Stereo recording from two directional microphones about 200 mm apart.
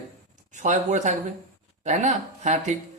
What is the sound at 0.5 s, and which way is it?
Speech, 35° right (ahead or behind).